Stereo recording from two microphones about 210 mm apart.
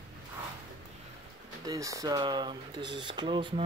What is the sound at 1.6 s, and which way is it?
Speech, 15° right (ahead or behind).